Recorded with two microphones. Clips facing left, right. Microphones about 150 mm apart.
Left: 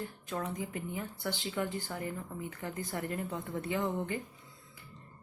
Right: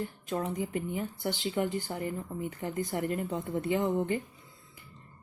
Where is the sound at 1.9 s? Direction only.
30° right (ahead or behind).